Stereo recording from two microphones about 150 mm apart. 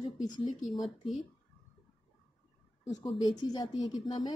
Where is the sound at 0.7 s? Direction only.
Centre (ahead or behind).